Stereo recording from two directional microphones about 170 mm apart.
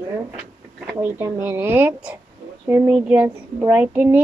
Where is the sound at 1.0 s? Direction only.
10° right (ahead or behind).